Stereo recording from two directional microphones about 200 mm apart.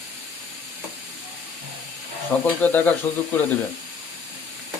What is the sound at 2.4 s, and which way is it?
Speech, 10° left (ahead or behind).